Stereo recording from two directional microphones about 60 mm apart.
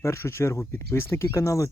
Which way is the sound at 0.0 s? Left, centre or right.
Left.